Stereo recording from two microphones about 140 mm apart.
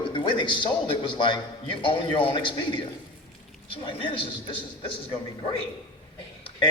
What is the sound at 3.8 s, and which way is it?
Speech, 35° left (ahead or behind).